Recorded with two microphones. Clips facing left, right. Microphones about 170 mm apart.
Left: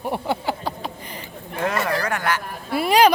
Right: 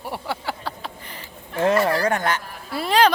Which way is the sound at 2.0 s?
25° right (ahead or behind).